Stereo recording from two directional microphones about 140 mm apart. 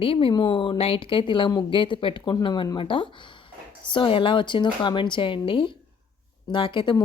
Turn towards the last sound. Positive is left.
turn(degrees=35)  # may be behind; listen again after turning